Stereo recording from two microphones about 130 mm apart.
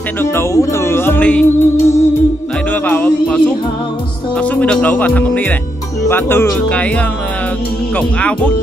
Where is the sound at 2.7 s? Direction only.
10° left (ahead or behind).